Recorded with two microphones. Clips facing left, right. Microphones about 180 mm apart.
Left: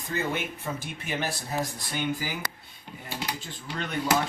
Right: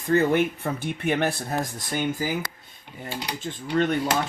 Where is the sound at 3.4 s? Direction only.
50° right (ahead or behind).